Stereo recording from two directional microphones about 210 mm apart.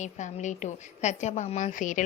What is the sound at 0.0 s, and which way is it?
A woman's voice, 35° left (ahead or behind).